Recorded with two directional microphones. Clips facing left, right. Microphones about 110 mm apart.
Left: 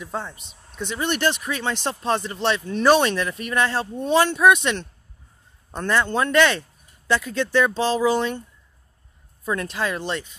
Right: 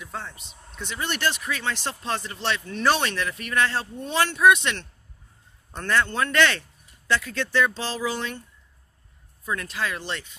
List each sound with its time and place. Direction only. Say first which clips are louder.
0.0 s speech: left 5 dB; 25° left (ahead or behind)
5.8 s speech: left 3 dB; 20° left (ahead or behind)
9.4 s speech: left 4 dB; 30° left (ahead or behind)